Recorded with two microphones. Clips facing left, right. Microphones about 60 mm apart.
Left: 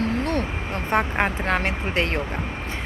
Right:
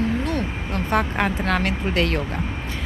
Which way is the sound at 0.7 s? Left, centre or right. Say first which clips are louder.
Right 1 dB; left.